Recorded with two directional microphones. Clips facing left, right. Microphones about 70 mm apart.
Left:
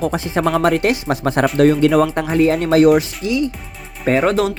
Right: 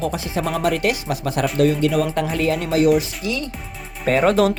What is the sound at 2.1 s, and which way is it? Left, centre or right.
Speech, left.